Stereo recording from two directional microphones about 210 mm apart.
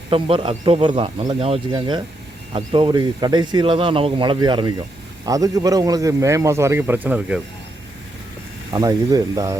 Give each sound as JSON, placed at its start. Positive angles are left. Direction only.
{"t": 0.1, "sound": "a man's voice", "side_deg": -25}
{"t": 8.7, "sound": "a man's voice", "side_deg": -20}